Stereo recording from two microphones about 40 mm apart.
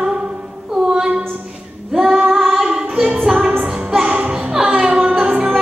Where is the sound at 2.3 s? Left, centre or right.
Centre.